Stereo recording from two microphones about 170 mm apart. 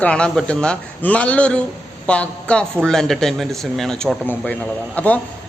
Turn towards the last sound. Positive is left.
turn(degrees=10)  # may be behind; listen again after turning